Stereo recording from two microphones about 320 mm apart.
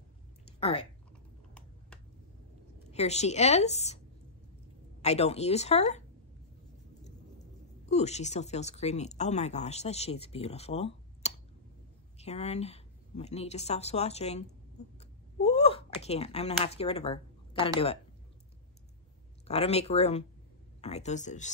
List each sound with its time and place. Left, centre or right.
0.6 s speech: centre
2.9 s speech: centre
5.0 s speech: centre
7.8 s speech: left
14.8 s a sound: left
15.4 s speech: centre
19.4 s speech: centre